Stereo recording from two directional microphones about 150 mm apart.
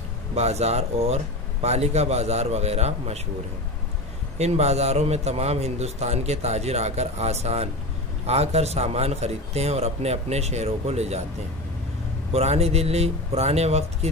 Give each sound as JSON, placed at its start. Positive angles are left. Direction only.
{"t": 0.3, "sound": "a man's voice", "side_deg": -45}
{"t": 4.4, "sound": "a man's voice", "side_deg": -45}
{"t": 12.3, "sound": "a man's voice", "side_deg": -45}